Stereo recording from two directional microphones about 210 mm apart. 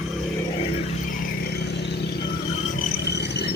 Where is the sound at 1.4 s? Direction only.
50° left (ahead or behind).